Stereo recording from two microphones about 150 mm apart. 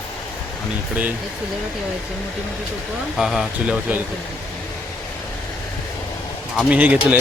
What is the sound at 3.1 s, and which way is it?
Speech, centre (ahead or behind).